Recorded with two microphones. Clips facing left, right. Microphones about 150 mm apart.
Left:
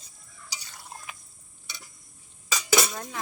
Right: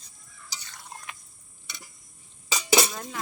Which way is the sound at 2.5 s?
30° right (ahead or behind).